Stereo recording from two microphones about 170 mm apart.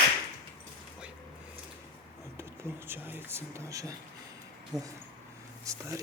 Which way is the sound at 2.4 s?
15° right (ahead or behind).